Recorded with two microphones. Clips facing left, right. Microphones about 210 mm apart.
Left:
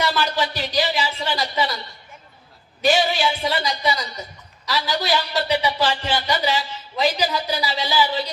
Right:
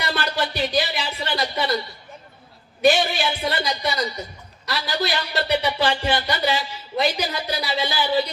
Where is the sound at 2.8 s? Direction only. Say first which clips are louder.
Even; 60° right (ahead or behind).